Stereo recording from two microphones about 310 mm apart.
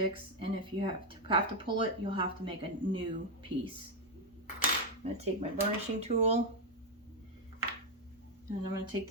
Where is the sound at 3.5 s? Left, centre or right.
Right.